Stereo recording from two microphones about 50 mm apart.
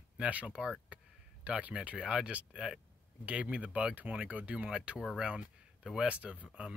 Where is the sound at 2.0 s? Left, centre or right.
Centre.